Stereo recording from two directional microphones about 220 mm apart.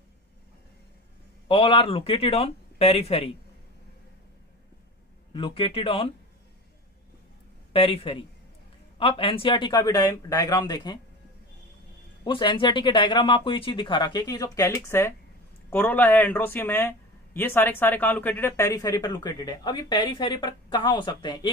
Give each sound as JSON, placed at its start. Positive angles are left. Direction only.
{"t": 1.5, "sound": "speech", "side_deg": 25}
{"t": 5.3, "sound": "speech", "side_deg": 25}
{"t": 7.7, "sound": "speech", "side_deg": 25}
{"t": 12.3, "sound": "speech", "side_deg": 20}